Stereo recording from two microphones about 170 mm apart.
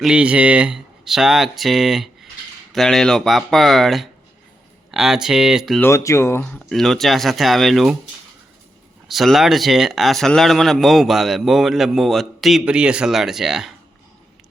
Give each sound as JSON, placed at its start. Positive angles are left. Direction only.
{"t": 0.0, "sound": "speech", "side_deg": -5}
{"t": 5.8, "sound": "speech", "side_deg": 15}
{"t": 6.4, "sound": "speech", "side_deg": 5}
{"t": 9.0, "sound": "speech", "side_deg": 0}